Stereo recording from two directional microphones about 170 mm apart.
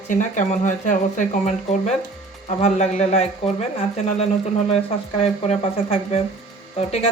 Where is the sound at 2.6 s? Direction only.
40° left (ahead or behind).